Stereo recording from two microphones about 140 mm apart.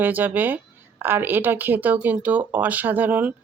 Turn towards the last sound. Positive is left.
turn(degrees=-10)  # may be behind; listen again after turning